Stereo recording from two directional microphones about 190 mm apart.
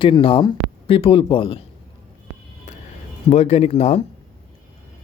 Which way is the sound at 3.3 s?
35° left (ahead or behind).